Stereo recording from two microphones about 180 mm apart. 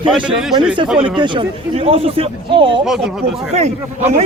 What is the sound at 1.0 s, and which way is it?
A man's voice, 25° right (ahead or behind).